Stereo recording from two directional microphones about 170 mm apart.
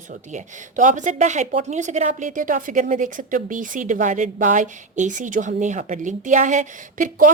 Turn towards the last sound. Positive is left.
turn(degrees=-50)  # may be behind; listen again after turning